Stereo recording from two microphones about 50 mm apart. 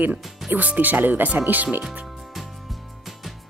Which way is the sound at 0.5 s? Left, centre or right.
Right.